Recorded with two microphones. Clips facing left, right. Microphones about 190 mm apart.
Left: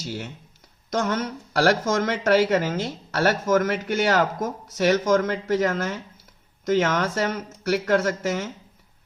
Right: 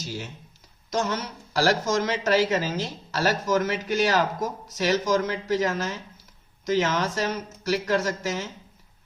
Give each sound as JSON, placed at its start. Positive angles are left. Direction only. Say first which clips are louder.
{"t": 0.0, "sound": "speech", "louder": "left 2 dB", "side_deg": 55}